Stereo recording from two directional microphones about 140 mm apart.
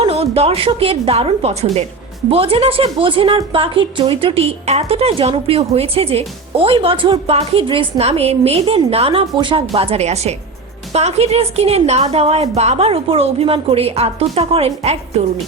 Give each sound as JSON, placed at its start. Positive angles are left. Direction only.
{"t": 0.0, "sound": "a woman's voice", "side_deg": -45}